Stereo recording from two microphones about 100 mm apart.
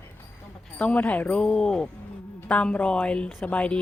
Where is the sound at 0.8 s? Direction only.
15° left (ahead or behind).